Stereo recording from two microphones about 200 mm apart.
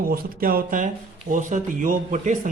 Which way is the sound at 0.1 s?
45° right (ahead or behind).